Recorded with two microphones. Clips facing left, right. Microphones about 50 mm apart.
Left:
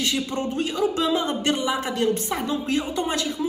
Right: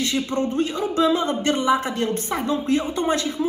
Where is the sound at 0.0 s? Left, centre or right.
Right.